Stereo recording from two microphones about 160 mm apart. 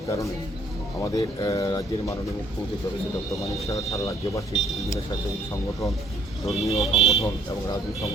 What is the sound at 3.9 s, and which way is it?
Speech, 20° left (ahead or behind).